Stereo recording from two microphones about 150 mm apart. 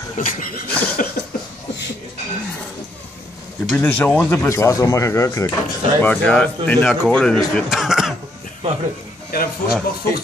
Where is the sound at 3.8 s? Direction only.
10° left (ahead or behind).